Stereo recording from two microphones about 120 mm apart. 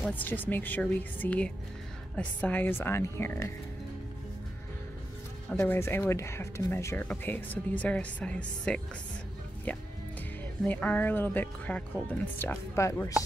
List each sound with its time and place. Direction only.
0.1 s speech: 15° left (ahead or behind)
5.6 s speech: 20° left (ahead or behind)
10.6 s speech: 10° left (ahead or behind)